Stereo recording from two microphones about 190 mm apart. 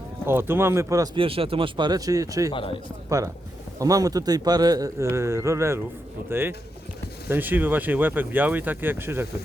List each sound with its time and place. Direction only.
0.3 s speech: 10° right (ahead or behind)
2.5 s a man's voice: 25° left (ahead or behind)
3.8 s speech: 20° right (ahead or behind)
7.3 s speech: 10° right (ahead or behind)